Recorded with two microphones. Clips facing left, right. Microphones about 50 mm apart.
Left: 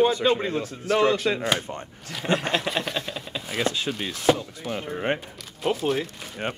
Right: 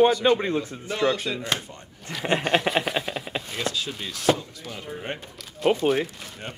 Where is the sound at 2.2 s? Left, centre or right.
Right.